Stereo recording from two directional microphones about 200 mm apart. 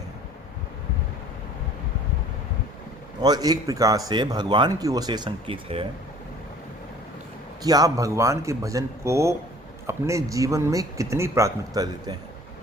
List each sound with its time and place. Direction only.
3.2 s speech: 20° right (ahead or behind)
7.6 s speech: 20° right (ahead or behind)